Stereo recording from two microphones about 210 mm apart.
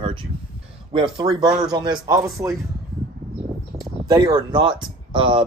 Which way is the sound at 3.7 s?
20° right (ahead or behind).